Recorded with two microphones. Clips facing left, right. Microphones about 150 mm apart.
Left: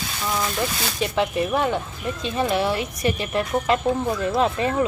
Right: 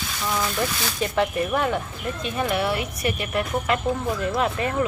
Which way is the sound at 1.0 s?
20° left (ahead or behind).